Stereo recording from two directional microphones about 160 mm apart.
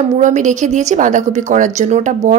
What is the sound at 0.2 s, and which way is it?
A woman's voice, 50° right (ahead or behind).